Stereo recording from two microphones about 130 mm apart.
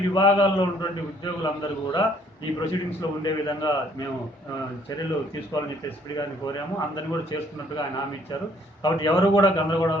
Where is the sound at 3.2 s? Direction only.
30° left (ahead or behind).